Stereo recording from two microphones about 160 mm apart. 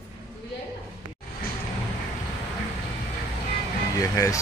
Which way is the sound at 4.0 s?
20° left (ahead or behind).